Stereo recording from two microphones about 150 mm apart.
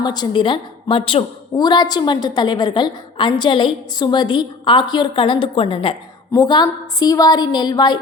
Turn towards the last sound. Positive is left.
turn(degrees=30)  # may be behind; listen again after turning